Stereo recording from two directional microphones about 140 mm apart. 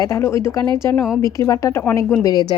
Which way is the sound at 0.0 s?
20° left (ahead or behind).